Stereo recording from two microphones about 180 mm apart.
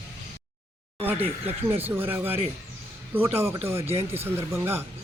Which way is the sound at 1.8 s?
10° right (ahead or behind).